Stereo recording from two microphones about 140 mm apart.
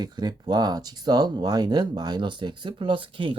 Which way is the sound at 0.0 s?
30° right (ahead or behind).